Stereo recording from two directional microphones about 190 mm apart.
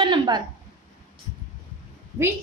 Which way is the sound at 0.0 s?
25° right (ahead or behind).